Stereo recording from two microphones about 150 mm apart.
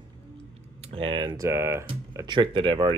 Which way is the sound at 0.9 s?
35° right (ahead or behind).